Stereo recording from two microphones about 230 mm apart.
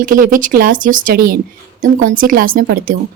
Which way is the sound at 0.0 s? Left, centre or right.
Right.